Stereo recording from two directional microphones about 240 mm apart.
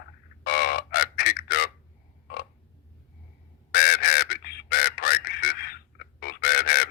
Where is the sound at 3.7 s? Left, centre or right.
Left.